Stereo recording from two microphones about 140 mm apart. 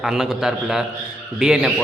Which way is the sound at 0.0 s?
5° right (ahead or behind).